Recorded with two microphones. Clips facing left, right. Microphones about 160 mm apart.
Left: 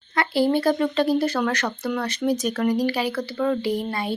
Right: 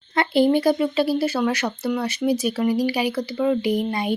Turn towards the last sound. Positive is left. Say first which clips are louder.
# right 3 dB
turn(degrees=-15)  # may be behind; listen again after turning